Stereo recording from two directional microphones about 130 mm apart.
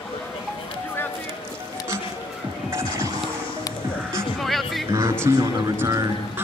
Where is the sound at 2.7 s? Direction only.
20° right (ahead or behind).